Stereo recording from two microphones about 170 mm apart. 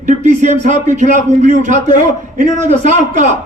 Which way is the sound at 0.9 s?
45° right (ahead or behind).